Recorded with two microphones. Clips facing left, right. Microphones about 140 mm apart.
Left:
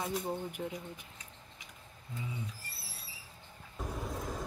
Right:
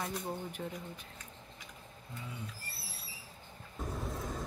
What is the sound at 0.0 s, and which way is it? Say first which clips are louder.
Speech: left 3 dB; 15° left (ahead or behind).